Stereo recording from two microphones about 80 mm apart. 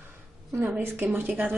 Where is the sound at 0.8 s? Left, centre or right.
Right.